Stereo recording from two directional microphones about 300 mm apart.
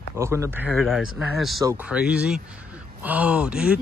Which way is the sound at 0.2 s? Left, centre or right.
Centre.